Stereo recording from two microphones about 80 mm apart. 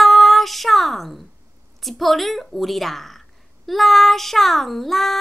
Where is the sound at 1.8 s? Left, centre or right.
Centre.